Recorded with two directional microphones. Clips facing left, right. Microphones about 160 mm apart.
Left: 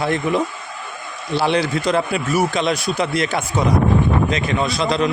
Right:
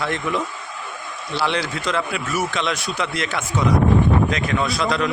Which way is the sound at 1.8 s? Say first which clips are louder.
Left 5 dB; 35° left (ahead or behind).